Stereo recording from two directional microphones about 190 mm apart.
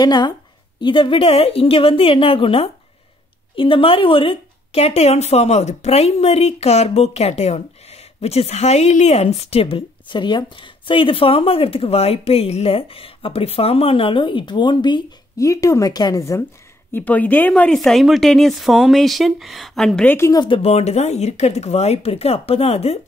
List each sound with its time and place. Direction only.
0.0 s a woman's voice: 20° left (ahead or behind)
20.4 s speech: 30° left (ahead or behind)